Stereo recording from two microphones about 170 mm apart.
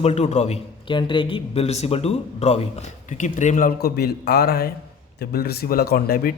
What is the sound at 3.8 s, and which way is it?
Speech, 65° left (ahead or behind).